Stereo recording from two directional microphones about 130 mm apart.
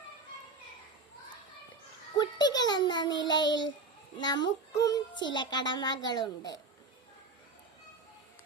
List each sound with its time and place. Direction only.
2.1 s child singing: 35° left (ahead or behind)